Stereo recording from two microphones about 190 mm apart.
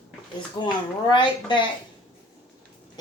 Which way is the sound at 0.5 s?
25° left (ahead or behind).